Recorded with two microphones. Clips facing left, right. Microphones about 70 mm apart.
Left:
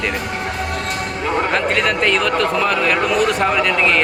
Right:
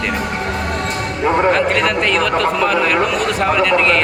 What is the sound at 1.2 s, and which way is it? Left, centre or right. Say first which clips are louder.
Speech: right 5 dB; right.